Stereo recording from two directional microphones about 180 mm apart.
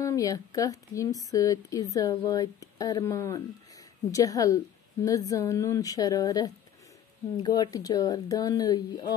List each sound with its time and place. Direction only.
0.0 s speech: 20° left (ahead or behind)